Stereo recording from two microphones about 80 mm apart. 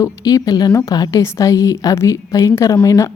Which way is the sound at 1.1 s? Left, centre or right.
Left.